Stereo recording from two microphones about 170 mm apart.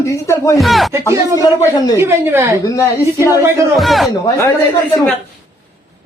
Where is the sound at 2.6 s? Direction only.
20° left (ahead or behind).